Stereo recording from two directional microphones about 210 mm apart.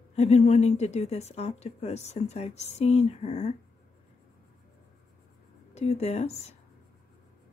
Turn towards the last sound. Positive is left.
turn(degrees=30)  # may be behind; listen again after turning